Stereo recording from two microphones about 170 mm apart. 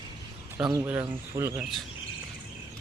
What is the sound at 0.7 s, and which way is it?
Speech, 15° right (ahead or behind).